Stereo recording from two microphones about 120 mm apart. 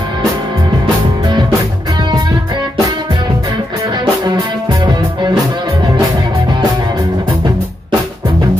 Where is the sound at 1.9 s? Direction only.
35° right (ahead or behind).